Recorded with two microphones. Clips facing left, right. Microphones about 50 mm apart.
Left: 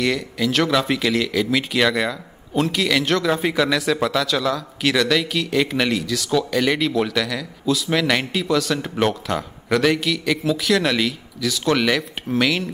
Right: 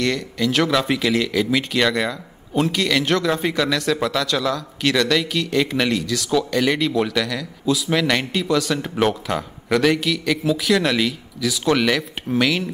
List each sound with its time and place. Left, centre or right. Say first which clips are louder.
0.0 s speech: even; centre